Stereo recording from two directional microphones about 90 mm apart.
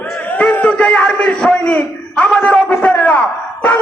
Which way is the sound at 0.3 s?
15° left (ahead or behind).